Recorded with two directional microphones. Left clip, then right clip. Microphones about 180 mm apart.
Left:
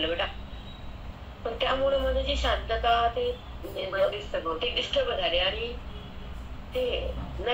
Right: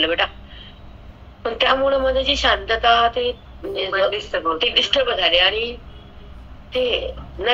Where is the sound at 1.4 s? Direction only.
45° right (ahead or behind).